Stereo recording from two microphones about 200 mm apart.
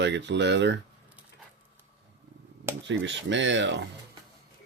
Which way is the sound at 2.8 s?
65° right (ahead or behind).